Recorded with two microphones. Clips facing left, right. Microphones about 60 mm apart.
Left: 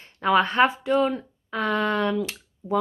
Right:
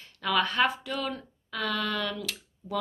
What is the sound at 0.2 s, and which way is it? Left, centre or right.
Speech, left.